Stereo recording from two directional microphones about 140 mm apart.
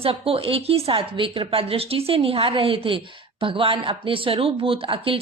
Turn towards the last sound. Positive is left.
turn(degrees=-40)  # may be behind; listen again after turning